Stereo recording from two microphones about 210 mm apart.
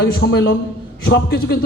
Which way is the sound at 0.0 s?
55° left (ahead or behind).